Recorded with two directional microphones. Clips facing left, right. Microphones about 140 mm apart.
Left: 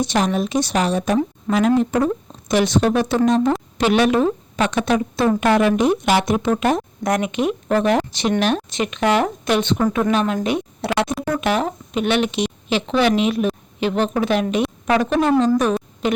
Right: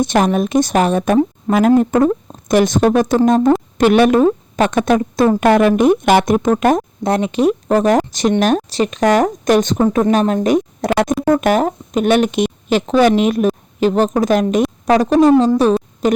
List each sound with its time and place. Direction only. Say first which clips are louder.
0.0 s speech: right 5 dB; 50° right (ahead or behind)
7.0 s speech: right 5 dB; 30° right (ahead or behind)